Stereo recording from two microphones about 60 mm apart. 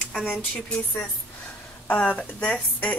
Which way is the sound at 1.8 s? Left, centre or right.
Left.